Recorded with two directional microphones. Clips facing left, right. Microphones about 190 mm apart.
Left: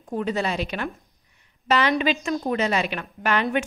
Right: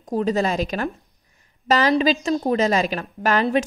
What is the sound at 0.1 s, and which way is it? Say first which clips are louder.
A woman's voice: right 4 dB; 40° right (ahead or behind).